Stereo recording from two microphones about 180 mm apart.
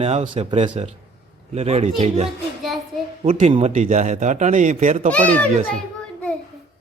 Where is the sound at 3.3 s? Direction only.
35° right (ahead or behind).